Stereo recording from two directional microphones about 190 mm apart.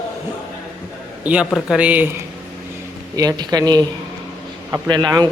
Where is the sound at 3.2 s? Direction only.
20° right (ahead or behind).